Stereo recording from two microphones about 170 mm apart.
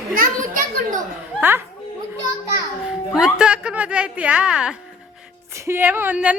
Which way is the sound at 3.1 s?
5° right (ahead or behind).